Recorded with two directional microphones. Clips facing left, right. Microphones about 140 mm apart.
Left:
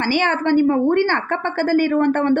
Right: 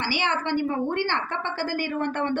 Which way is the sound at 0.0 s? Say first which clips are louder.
Left 8 dB; 50° left (ahead or behind).